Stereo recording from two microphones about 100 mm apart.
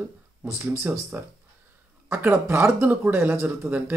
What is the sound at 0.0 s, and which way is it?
Speech, 25° right (ahead or behind).